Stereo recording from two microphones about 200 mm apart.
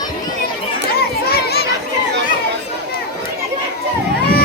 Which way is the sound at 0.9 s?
50° left (ahead or behind).